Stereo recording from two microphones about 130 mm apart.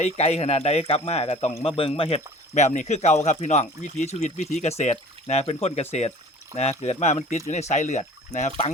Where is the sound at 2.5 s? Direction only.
65° left (ahead or behind).